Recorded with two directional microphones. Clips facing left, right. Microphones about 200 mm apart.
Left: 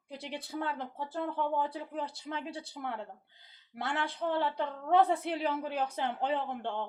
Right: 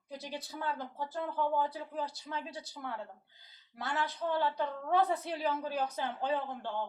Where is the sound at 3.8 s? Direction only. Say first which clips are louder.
Left 1 dB; 25° left (ahead or behind).